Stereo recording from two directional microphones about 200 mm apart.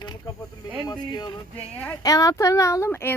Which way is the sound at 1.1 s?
20° left (ahead or behind).